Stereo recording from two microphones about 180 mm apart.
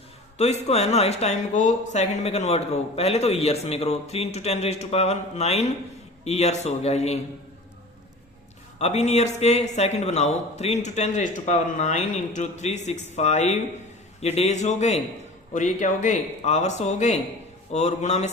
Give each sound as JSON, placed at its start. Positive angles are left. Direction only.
{"t": 0.3, "sound": "speech", "side_deg": 35}
{"t": 8.8, "sound": "speech", "side_deg": 35}